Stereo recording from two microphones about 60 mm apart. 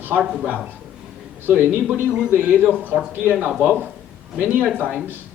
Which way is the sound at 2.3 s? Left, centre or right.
Centre.